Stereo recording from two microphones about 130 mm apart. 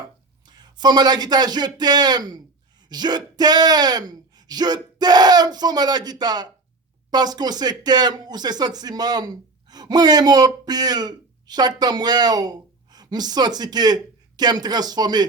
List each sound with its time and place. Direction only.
0.4 s speech: 35° right (ahead or behind)